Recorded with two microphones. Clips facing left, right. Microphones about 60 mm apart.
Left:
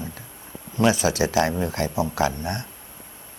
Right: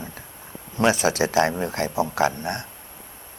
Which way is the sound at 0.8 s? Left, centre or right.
Right.